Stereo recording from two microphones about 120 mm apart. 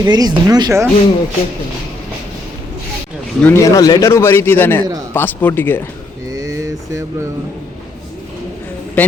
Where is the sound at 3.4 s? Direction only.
25° left (ahead or behind).